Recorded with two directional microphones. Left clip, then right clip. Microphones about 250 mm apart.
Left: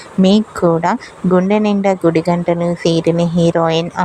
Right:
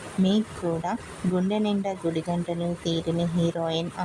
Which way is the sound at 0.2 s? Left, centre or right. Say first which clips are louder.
Left 14 dB; left.